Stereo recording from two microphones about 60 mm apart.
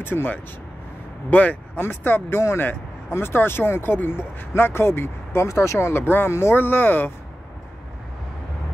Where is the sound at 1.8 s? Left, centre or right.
Left.